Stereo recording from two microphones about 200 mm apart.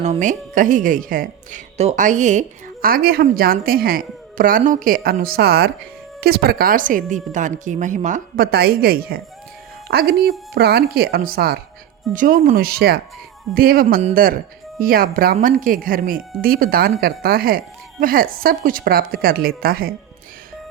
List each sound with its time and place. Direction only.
0.0 s a woman's voice: 35° right (ahead or behind)
13.8 s speech: 35° right (ahead or behind)
14.1 s a woman's voice: 45° right (ahead or behind)